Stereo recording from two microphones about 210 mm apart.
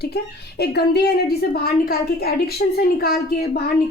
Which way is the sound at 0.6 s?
50° left (ahead or behind).